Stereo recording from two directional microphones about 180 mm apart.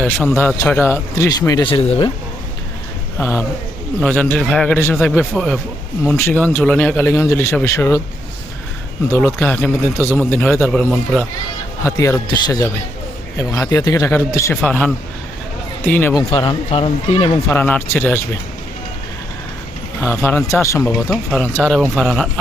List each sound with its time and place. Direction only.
0.3 s a man's voice: 15° left (ahead or behind); by 2.0 s 30° left (ahead or behind)
3.2 s a man's voice: 15° left (ahead or behind)
9.0 s a man's voice: 15° left (ahead or behind)
11.8 s a man's voice: 15° left (ahead or behind)
14.6 s a man's voice: 5° left (ahead or behind)
16.1 s speech: 25° left (ahead or behind)
17.5 s a man's voice: 10° left (ahead or behind)
20.0 s a man's voice: 15° left (ahead or behind)